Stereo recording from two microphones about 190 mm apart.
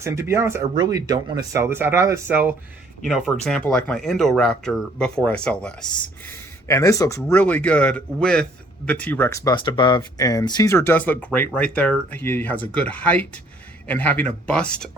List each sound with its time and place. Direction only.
0.0 s speech: 15° right (ahead or behind); by 14.8 s 5° left (ahead or behind)